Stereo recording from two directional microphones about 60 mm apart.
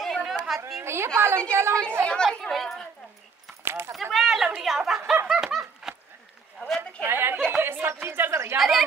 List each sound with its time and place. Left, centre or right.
0.0 s chatter: centre
0.8 s speech: right
2.0 s speech: centre
3.6 s a sound: right
4.1 s speech: centre
5.3 s snicker: centre
7.1 s a woman's voice: right
7.5 s a sound: right
7.8 s speech: right
8.5 s speech: centre